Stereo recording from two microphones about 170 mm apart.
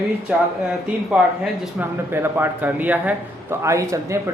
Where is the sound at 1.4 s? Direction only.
10° right (ahead or behind).